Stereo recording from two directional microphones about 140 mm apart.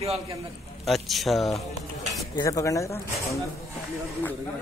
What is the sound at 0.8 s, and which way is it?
Speech, centre (ahead or behind).